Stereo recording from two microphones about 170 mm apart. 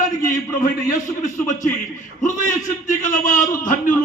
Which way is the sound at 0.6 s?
45° left (ahead or behind).